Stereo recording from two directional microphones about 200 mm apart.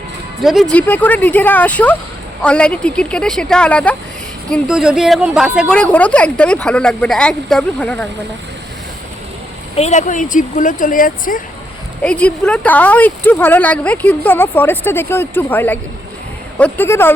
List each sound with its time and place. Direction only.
0.4 s a woman's voice: centre (ahead or behind)
9.7 s speech: 35° left (ahead or behind)
12.0 s speech: 5° left (ahead or behind)